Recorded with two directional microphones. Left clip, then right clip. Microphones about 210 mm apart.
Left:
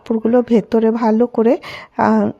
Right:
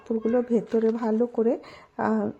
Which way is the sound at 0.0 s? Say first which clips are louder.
Left 9 dB; 25° left (ahead or behind).